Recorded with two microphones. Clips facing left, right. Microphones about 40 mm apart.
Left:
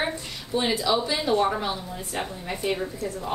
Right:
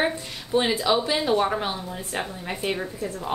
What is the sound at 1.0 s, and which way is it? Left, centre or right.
A woman's voice, centre.